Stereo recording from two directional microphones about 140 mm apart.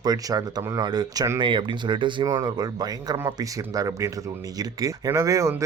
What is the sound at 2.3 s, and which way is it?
Speech, 25° right (ahead or behind).